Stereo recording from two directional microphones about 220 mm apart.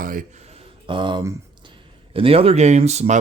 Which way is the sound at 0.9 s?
20° right (ahead or behind).